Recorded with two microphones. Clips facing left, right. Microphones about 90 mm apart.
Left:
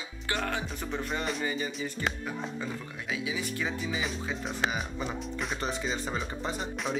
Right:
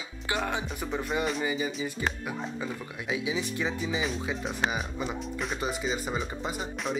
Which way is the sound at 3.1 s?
20° right (ahead or behind).